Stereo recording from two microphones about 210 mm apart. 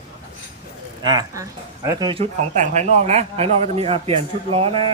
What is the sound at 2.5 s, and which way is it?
A man's voice, 35° right (ahead or behind).